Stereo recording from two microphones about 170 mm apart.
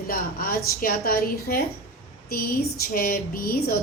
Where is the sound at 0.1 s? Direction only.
55° left (ahead or behind).